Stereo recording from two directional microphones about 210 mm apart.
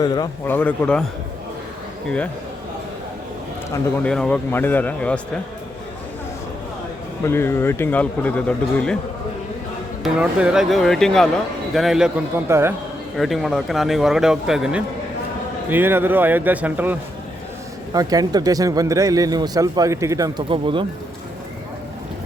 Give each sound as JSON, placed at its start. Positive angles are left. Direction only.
{"t": 0.0, "sound": "speech", "side_deg": 20}
{"t": 2.0, "sound": "a man's voice", "side_deg": 5}
{"t": 4.0, "sound": "a man's voice", "side_deg": 5}
{"t": 7.3, "sound": "speech", "side_deg": 10}
{"t": 10.0, "sound": "a man's voice", "side_deg": -5}
{"t": 12.5, "sound": "speech", "side_deg": -10}
{"t": 13.1, "sound": "a man's voice", "side_deg": 0}